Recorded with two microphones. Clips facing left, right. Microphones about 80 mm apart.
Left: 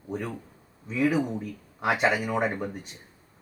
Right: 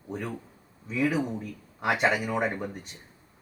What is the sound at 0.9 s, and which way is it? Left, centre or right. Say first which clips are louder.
Speech: left 2 dB; centre.